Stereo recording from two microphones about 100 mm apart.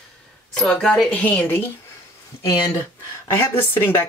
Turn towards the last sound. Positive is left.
turn(degrees=20)  # may be behind; listen again after turning